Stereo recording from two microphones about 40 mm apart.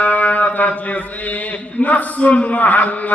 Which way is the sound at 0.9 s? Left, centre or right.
Left.